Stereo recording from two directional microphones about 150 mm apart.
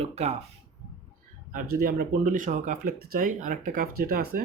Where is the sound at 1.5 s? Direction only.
80° right.